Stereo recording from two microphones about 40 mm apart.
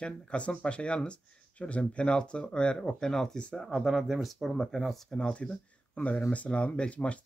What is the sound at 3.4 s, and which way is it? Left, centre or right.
Speech, left.